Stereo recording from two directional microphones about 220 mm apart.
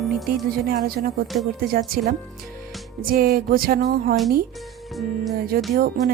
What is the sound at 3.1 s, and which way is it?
Speech, 40° right (ahead or behind).